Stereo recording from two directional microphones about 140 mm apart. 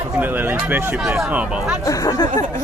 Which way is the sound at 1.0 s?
Centre (ahead or behind).